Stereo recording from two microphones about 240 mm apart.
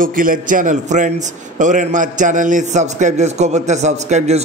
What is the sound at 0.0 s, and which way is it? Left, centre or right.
A man's voice, right.